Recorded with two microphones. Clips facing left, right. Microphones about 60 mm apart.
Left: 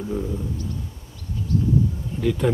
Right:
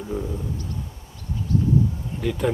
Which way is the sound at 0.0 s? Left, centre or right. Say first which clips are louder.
Left 2 dB; centre.